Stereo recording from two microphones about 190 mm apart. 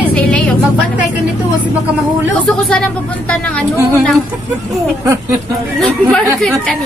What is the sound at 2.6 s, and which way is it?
Speech, 5° left (ahead or behind).